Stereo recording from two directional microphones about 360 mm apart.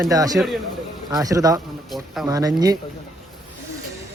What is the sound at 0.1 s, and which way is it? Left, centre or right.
Speech, centre.